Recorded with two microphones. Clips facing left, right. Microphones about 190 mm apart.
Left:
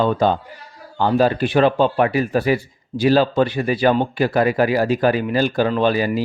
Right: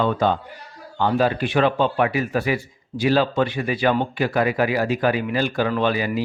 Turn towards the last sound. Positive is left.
turn(degrees=35)  # may be behind; listen again after turning